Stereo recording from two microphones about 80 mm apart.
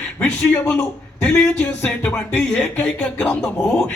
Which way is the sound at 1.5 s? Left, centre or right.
Left.